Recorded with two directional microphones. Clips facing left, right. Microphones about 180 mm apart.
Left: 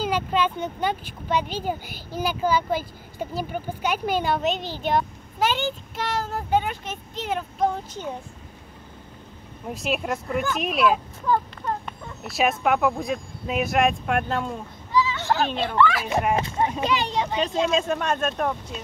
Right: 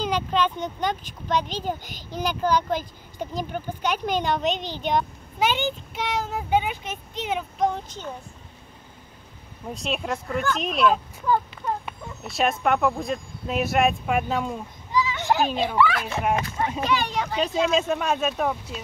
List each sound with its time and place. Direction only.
0.0 s speech: 5° left (ahead or behind)
9.7 s speech: 5° left (ahead or behind)
14.9 s a child's voice: 15° right (ahead or behind)
16.8 s speech: 25° left (ahead or behind)
17.4 s speech: 5° right (ahead or behind)